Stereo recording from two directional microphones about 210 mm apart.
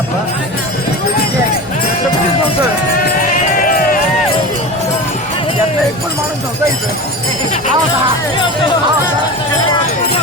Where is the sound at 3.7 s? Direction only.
40° left (ahead or behind).